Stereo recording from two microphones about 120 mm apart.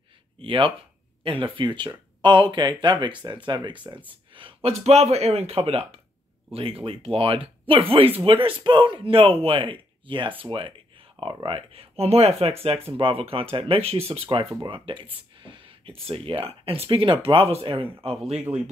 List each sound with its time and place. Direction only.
0.4 s speech: 45° right (ahead or behind)
4.1 s a sound: 45° right (ahead or behind)
4.6 s speech: 60° right (ahead or behind)